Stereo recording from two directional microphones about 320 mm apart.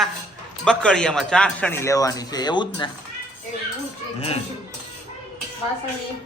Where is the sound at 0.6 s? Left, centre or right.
Centre.